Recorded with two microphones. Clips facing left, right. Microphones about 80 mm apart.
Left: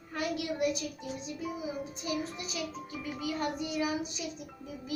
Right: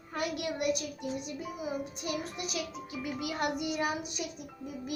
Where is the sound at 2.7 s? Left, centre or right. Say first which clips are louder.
Right 2 dB; centre.